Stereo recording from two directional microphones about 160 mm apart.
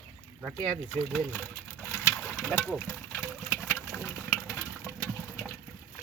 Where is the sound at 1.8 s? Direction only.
10° left (ahead or behind).